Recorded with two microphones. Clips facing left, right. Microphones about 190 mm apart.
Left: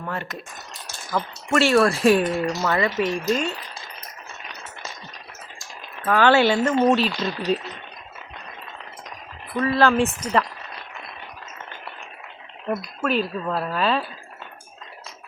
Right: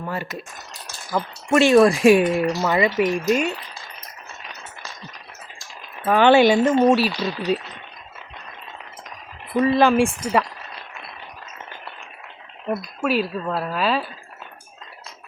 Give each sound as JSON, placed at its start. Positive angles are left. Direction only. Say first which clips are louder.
{"t": 0.0, "sound": "speech", "louder": "right 2 dB", "side_deg": -5}
{"t": 1.5, "sound": "speech", "louder": "right 4 dB", "side_deg": -15}
{"t": 6.1, "sound": "speech", "louder": "right 3 dB", "side_deg": -20}
{"t": 9.6, "sound": "speech", "louder": "right 3 dB", "side_deg": -20}
{"t": 12.6, "sound": "speech", "louder": "right 1 dB", "side_deg": -5}